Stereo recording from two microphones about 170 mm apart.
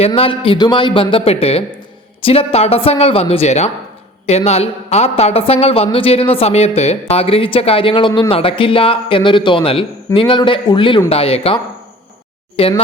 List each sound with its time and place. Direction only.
0.0 s a man's voice: 35° left (ahead or behind)